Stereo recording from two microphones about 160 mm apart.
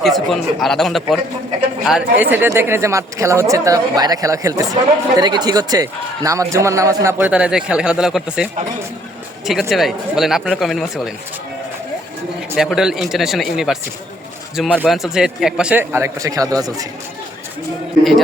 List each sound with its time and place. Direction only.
0.0 s speech: centre (ahead or behind)
9.5 s speech: centre (ahead or behind)
12.5 s speech: centre (ahead or behind)
14.8 s a man's voice: centre (ahead or behind); by 16.8 s 25° right (ahead or behind)